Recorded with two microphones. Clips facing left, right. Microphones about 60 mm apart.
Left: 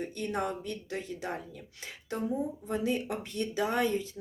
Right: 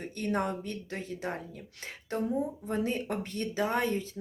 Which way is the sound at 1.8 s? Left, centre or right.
Right.